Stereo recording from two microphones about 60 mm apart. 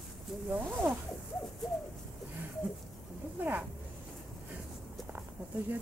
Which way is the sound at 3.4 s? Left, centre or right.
Right.